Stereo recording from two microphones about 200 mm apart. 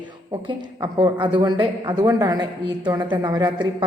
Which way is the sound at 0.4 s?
20° right (ahead or behind).